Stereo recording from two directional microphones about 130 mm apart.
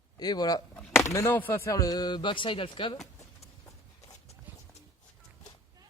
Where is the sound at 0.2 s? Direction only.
30° left (ahead or behind).